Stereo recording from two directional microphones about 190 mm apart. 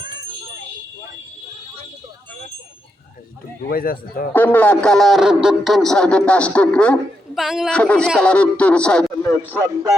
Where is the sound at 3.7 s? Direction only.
50° left (ahead or behind).